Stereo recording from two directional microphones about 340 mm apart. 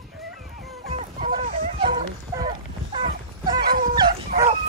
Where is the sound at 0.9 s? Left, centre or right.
Right.